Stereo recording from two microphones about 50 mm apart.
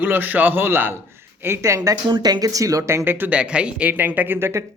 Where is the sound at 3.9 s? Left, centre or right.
Right.